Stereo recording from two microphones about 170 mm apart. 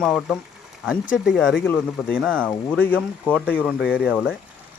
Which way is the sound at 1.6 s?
10° left (ahead or behind).